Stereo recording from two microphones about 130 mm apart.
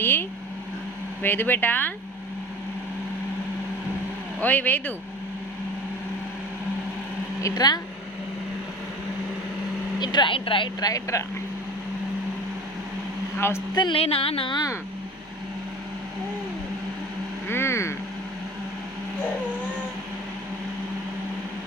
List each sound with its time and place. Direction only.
0.0 s speech: 15° left (ahead or behind)
4.4 s speech: 15° left (ahead or behind)
7.4 s speech: 30° left (ahead or behind)
10.0 s speech: 35° left (ahead or behind)
13.7 s speech: 35° left (ahead or behind)
14.0 s speech: 45° left (ahead or behind)
17.5 s vehicle: 20° left (ahead or behind)